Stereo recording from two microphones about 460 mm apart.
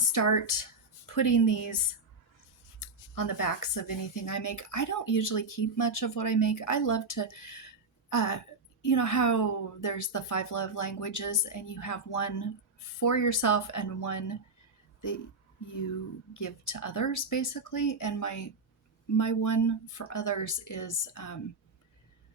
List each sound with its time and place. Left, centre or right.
0.1 s speech: left
2.8 s speech: left
16.3 s speech: left